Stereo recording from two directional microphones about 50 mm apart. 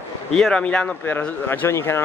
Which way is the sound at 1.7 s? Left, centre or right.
Left.